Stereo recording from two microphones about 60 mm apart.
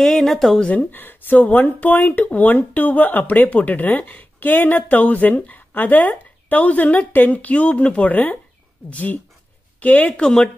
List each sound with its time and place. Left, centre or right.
0.0 s speech: centre
0.6 s speech: left
0.9 s speech: left
10.2 s speech: centre